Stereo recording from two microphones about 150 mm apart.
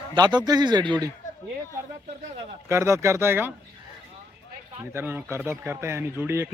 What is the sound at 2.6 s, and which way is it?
Speech, 20° right (ahead or behind).